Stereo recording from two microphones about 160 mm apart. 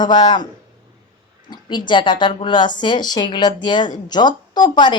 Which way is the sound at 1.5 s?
30° left (ahead or behind).